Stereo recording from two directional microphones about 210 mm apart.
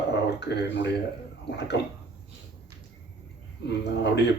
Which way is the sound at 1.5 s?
55° left (ahead or behind).